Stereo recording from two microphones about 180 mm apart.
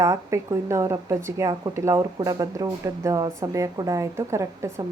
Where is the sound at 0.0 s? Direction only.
15° right (ahead or behind).